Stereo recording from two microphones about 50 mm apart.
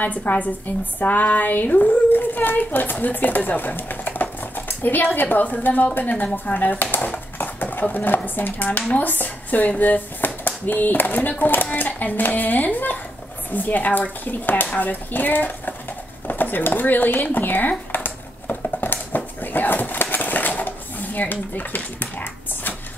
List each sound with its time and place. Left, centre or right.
0.0 s a child's voice: left
7.3 s dishes: left
8.4 s a child's voice: left
16.3 s a sound: left